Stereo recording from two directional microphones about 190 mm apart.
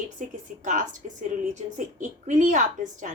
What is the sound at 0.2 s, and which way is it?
A woman's voice, 45° right (ahead or behind).